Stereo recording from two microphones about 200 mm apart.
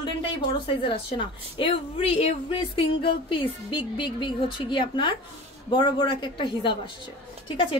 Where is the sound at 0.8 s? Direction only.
25° left (ahead or behind).